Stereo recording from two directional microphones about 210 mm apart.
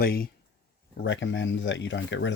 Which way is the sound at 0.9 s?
60° left (ahead or behind).